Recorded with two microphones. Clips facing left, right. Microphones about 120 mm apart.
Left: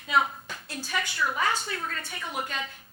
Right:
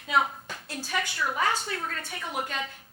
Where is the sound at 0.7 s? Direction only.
55° right (ahead or behind).